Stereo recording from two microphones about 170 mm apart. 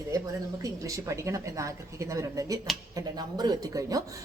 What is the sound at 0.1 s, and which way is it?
Speech, 20° right (ahead or behind).